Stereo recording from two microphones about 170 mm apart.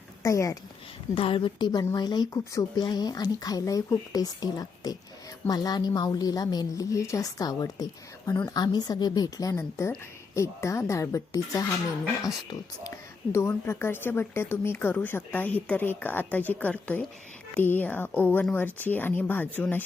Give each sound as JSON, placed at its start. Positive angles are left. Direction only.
{"t": 0.2, "sound": "a woman's voice", "side_deg": 20}
{"t": 1.1, "sound": "speech", "side_deg": 35}